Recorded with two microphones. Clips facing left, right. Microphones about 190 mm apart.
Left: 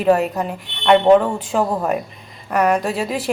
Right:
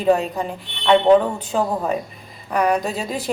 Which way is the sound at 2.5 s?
5° left (ahead or behind).